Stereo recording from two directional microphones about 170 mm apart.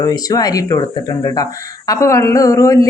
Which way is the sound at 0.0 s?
20° left (ahead or behind).